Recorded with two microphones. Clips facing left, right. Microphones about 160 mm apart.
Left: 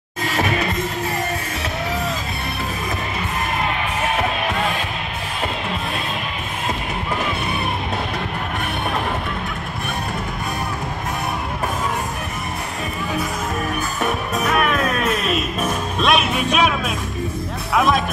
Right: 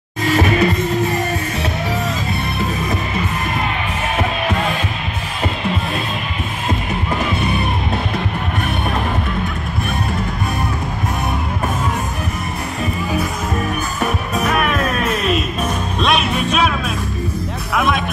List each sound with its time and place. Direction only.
0.3 s music: centre (ahead or behind)
4.2 s music: centre (ahead or behind)
14.0 s music: centre (ahead or behind)